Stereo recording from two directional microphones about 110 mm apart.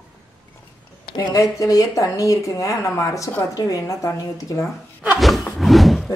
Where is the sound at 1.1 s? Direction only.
35° left (ahead or behind).